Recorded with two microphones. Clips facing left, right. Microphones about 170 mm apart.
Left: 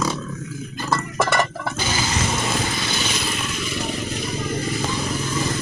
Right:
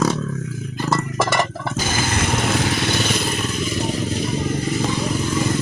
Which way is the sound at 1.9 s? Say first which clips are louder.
Right 2 dB; 50° right (ahead or behind).